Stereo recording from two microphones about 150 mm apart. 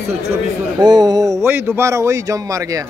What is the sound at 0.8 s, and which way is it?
A man's voice, 25° right (ahead or behind).